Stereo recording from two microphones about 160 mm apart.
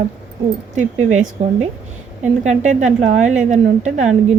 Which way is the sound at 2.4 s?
45° right (ahead or behind).